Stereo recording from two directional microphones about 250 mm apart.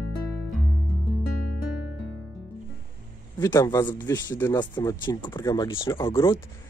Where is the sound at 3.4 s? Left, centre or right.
Centre.